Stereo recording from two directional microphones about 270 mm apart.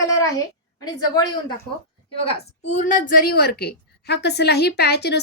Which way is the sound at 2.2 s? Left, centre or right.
Left.